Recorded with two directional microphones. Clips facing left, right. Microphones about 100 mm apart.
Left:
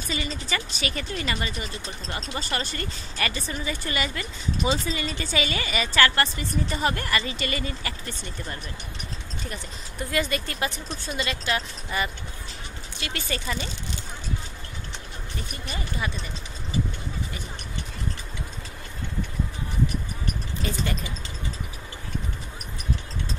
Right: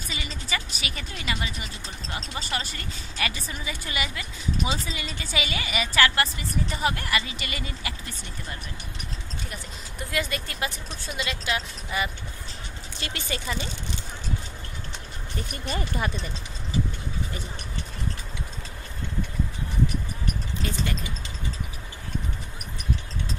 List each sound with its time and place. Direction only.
0.1 s speech: 10° right (ahead or behind)
10.1 s speech: centre (ahead or behind)
13.1 s speech: 20° right (ahead or behind)
15.3 s speech: 40° right (ahead or behind)
20.6 s speech: centre (ahead or behind)